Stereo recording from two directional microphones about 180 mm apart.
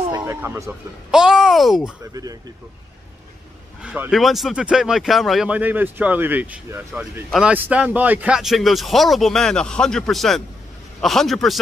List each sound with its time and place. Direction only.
0.1 s a sound: 20° right (ahead or behind)
1.1 s speech: 5° right (ahead or behind)
3.8 s speech: 5° right (ahead or behind)